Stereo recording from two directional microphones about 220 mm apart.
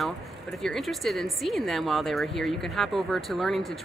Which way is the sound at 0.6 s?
Centre (ahead or behind).